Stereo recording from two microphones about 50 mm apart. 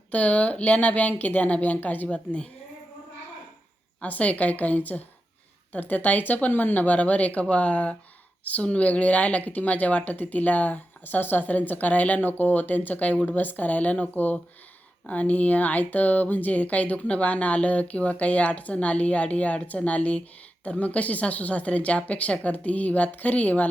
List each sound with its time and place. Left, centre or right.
0.1 s speech: left
2.0 s speech: left
4.0 s a woman's voice: left